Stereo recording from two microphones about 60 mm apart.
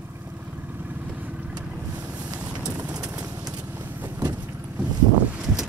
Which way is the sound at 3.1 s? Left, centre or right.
Right.